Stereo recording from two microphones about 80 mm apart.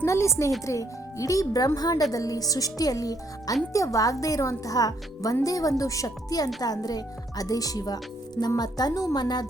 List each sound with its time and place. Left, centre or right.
0.0 s speech: left